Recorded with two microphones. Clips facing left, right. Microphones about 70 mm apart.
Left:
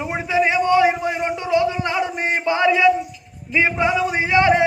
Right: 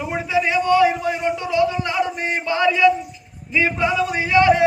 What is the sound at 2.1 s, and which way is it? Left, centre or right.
Speech, left.